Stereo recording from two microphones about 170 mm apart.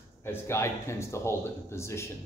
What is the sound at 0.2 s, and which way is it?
Speech, 15° left (ahead or behind).